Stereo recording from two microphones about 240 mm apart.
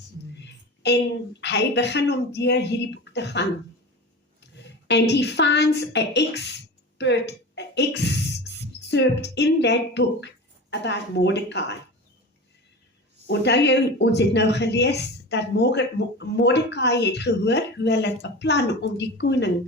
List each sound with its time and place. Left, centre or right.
0.3 s a sound: left
1.4 s a woman's voice: left
13.2 s speech: left